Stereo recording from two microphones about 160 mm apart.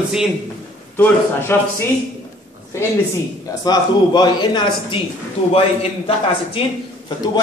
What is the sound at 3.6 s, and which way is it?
Speech, 25° left (ahead or behind).